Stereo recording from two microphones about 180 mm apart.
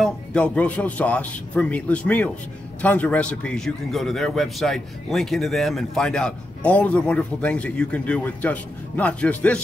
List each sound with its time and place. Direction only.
0.0 s a man's voice: 5° left (ahead or behind)